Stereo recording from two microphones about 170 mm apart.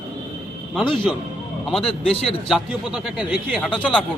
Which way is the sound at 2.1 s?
35° left (ahead or behind).